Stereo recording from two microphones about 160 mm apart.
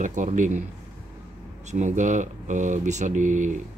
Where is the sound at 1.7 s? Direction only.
50° right (ahead or behind).